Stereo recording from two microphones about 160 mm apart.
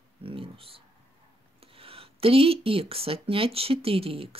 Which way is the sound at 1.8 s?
35° right (ahead or behind).